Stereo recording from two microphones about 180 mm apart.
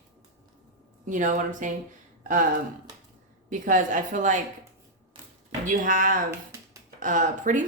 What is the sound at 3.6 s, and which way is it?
Speech, 45° right (ahead or behind).